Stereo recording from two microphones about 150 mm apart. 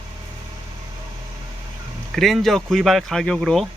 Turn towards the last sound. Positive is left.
turn(degrees=5)  # may be behind; listen again after turning